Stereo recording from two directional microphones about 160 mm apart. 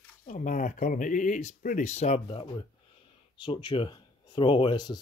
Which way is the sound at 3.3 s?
30° left (ahead or behind).